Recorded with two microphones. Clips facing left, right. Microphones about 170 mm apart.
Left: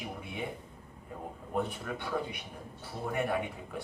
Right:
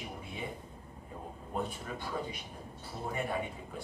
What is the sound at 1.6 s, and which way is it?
A man's voice, 65° left (ahead or behind).